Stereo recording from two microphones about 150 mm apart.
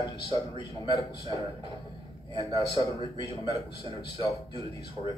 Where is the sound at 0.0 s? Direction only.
30° left (ahead or behind).